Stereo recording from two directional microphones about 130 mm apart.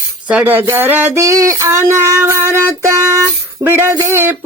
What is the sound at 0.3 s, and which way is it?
Child singing, 10° right (ahead or behind).